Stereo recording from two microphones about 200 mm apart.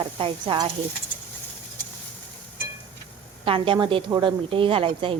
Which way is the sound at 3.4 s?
25° right (ahead or behind).